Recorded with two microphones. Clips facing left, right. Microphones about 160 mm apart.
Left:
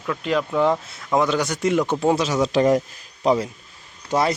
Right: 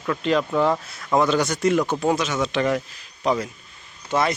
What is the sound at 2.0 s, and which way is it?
Speech, 30° left (ahead or behind).